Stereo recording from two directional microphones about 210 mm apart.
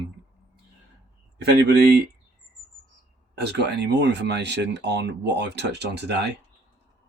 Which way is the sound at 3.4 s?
55° right (ahead or behind).